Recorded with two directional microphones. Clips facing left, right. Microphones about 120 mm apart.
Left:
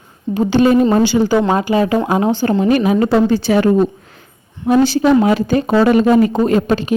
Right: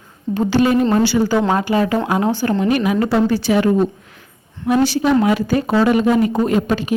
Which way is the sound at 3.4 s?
35° left (ahead or behind).